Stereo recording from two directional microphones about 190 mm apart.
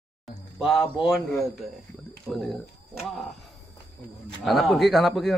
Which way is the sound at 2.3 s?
Centre (ahead or behind).